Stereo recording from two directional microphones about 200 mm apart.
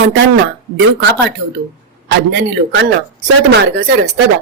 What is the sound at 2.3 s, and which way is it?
A woman's voice, 60° right (ahead or behind).